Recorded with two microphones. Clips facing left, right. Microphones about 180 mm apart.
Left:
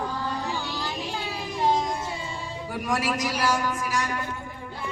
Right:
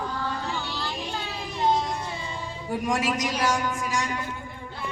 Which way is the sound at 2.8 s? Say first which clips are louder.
Even; 20° right (ahead or behind).